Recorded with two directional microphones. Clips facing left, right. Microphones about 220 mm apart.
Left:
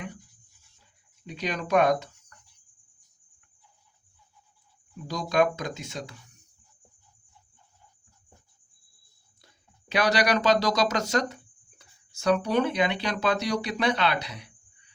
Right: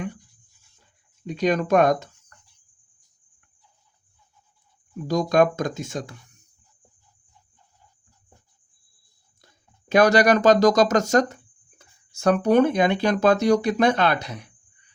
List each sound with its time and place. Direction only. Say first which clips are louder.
1.3 s speech: right 6 dB; 45° right (ahead or behind)
5.0 s speech: right 6 dB; 45° right (ahead or behind)
9.9 s speech: right 8 dB; 45° right (ahead or behind)